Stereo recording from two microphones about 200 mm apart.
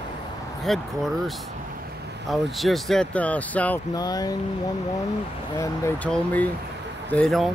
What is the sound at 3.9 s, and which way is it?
Speech, 20° left (ahead or behind).